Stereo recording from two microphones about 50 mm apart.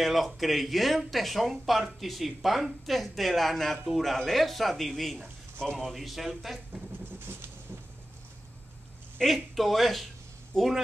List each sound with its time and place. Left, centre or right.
0.0 s speech: centre
7.1 s vehicle: right
9.2 s speech: centre